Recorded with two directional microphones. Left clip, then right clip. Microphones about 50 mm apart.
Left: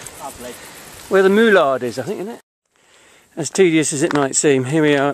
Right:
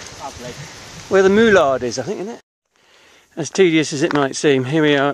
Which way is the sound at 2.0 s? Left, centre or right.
Centre.